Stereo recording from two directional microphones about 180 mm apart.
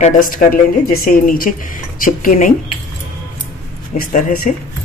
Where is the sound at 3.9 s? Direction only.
50° left (ahead or behind).